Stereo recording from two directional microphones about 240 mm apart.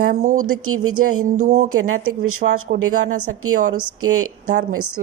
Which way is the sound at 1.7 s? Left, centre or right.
Right.